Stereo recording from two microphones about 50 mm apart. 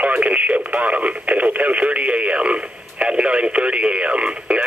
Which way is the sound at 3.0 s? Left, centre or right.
Right.